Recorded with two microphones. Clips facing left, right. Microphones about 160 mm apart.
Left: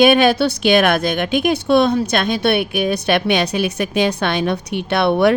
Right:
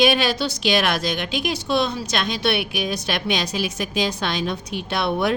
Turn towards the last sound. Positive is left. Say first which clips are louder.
# left 7 dB
turn(degrees=65)  # may be behind; listen again after turning